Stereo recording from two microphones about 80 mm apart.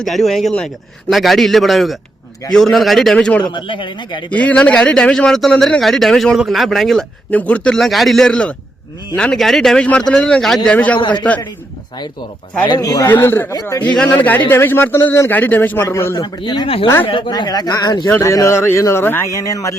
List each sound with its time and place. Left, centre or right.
0.0 s a man's voice: centre
0.5 s speech: centre
1.1 s a man's voice: centre
3.4 s speech: left
4.3 s a man's voice: centre
7.3 s speech: centre
7.8 s a man's voice: centre
12.6 s speech: left
13.1 s speech: left
13.8 s speech: centre; by 16.1 s left
16.1 s speech: left
17.1 s speech: left
18.1 s speech: left
19.5 s a man's voice: left